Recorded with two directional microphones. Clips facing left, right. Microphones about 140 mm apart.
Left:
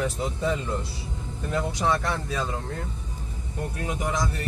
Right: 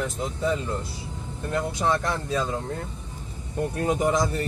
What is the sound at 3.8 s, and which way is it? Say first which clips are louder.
Speech: right 7 dB; 40° right (ahead or behind).